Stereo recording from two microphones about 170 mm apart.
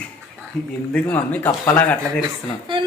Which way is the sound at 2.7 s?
30° right (ahead or behind).